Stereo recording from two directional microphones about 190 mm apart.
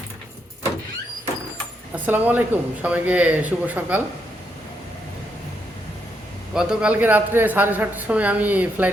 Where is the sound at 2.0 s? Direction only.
10° right (ahead or behind).